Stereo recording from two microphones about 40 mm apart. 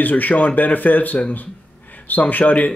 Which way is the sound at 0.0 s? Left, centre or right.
Left.